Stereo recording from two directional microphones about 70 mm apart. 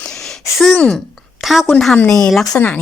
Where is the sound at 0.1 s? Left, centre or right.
Centre.